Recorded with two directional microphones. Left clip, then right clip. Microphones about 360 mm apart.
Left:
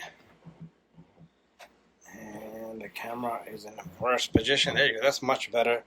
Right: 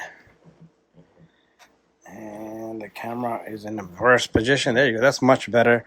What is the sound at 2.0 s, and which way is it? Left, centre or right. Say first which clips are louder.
Speech: right 7 dB; right.